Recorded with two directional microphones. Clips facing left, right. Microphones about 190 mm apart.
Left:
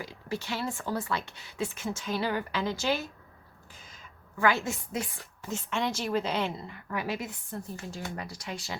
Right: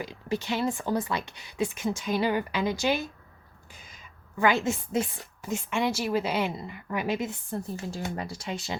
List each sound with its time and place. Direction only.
0.0 s a woman's voice: 20° right (ahead or behind)